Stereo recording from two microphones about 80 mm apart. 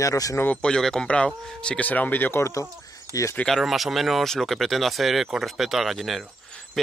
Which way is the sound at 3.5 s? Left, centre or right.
Centre.